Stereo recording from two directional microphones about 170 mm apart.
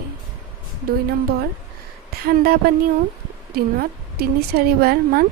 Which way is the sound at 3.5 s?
65° right (ahead or behind).